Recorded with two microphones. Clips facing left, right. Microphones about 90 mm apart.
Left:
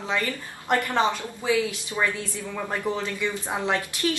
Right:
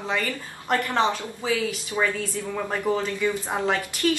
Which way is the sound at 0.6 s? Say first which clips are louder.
Even; 15° left (ahead or behind).